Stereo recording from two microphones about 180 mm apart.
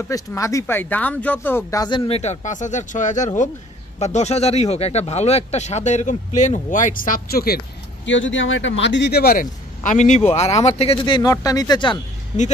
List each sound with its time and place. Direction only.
0.1 s speech: 15° left (ahead or behind)